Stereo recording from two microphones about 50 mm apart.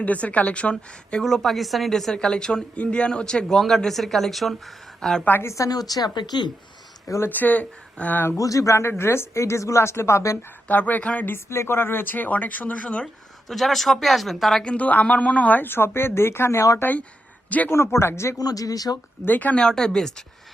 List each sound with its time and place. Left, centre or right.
0.0 s a woman's voice: left
1.2 s speech: centre
2.1 s a woman's voice: centre
5.4 s speech: left
7.3 s speech: left
8.4 s speech: left
10.7 s speech: left
11.4 s speech: left
13.5 s speech: centre
14.6 s a woman's voice: left
15.6 s speech: left
17.7 s speech: left
19.2 s speech: left
19.5 s speech: centre